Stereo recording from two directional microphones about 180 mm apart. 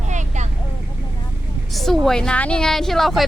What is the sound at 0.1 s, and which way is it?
Vehicle, 40° right (ahead or behind).